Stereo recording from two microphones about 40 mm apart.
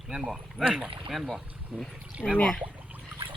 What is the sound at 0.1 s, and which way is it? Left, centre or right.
Speech, centre.